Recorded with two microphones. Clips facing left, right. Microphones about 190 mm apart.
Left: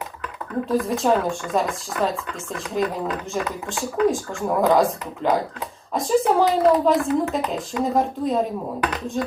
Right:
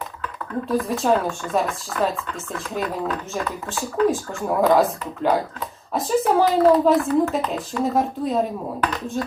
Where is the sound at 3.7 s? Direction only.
15° left (ahead or behind).